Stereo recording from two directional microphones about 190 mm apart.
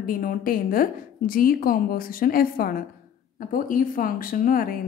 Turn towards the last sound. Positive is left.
turn(degrees=45)  # may be behind; listen again after turning